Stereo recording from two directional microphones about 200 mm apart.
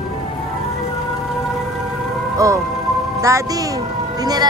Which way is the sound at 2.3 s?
15° right (ahead or behind).